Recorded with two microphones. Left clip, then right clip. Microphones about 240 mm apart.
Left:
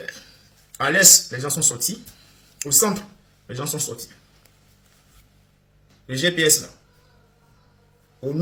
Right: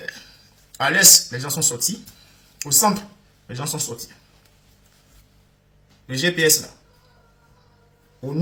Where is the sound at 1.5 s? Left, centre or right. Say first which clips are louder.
Even; centre.